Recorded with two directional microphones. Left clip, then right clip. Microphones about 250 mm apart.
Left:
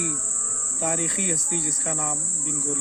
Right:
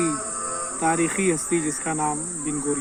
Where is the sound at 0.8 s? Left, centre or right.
Centre.